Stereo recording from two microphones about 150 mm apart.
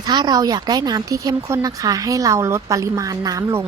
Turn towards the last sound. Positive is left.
turn(degrees=-20)  # may be behind; listen again after turning